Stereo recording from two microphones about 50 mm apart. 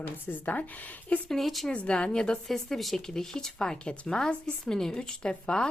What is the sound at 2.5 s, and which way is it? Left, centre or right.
Speech, centre.